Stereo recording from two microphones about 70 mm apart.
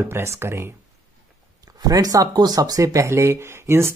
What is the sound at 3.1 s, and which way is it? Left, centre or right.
Speech, right.